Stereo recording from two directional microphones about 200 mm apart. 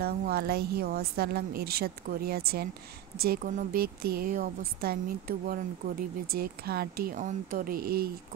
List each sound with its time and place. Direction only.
0.0 s a woman's voice: 50° right (ahead or behind)